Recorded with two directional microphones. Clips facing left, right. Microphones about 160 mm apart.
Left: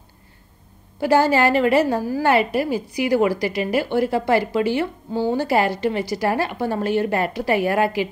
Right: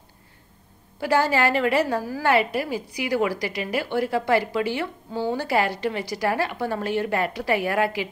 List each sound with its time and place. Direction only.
1.0 s a woman's voice: 35° left (ahead or behind)